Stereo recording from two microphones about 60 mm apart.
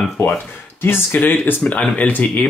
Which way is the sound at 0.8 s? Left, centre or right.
Left.